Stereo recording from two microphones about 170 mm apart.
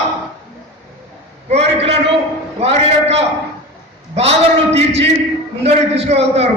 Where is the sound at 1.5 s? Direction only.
40° right (ahead or behind).